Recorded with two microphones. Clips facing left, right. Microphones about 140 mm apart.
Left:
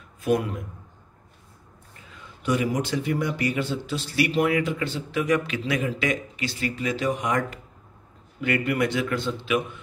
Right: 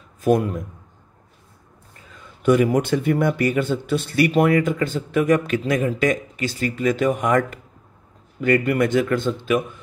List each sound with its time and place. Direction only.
0.2 s speech: 45° right (ahead or behind)
2.4 s speech: 55° right (ahead or behind)